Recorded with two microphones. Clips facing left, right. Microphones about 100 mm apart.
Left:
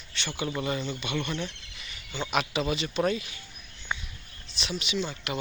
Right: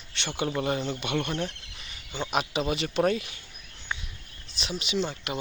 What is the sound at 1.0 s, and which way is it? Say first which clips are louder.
Speech: right 2 dB; 55° right (ahead or behind).